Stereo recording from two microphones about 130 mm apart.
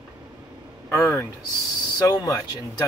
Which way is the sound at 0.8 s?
20° left (ahead or behind).